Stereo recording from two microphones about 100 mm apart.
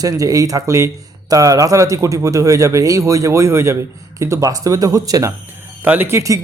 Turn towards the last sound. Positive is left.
turn(degrees=-30)  # may be behind; listen again after turning